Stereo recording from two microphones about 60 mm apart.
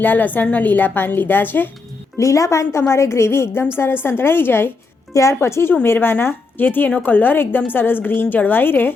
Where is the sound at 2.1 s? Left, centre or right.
Left.